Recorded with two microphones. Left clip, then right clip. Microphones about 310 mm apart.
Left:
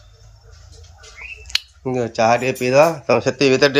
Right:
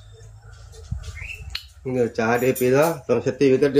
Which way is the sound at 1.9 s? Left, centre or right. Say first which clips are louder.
Left 5 dB; centre.